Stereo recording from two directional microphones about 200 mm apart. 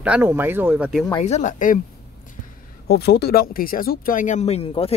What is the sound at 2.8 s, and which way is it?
Speech, 55° left (ahead or behind).